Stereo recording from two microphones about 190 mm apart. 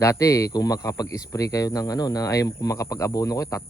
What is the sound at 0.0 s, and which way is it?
A man's voice, 15° left (ahead or behind).